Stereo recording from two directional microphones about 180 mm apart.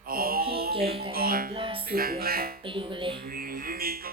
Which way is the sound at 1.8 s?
55° right (ahead or behind).